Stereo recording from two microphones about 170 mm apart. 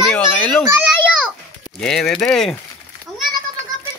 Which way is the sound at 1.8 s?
5° left (ahead or behind).